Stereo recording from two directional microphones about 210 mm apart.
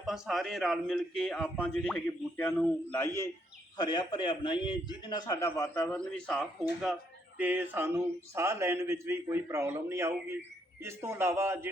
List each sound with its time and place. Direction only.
0.0 s a man's voice: centre (ahead or behind)
7.3 s a man's voice: 5° right (ahead or behind)